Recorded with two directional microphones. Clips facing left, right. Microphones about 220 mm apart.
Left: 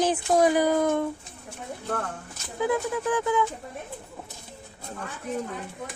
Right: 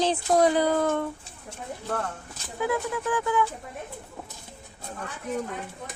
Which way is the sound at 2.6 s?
15° left (ahead or behind).